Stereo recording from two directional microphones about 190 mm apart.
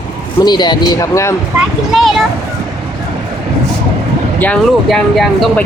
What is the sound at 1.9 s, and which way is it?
Speech, centre (ahead or behind).